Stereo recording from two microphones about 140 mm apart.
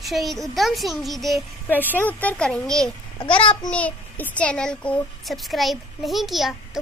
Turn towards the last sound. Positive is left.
turn(degrees=0)  # may be behind; listen again after turning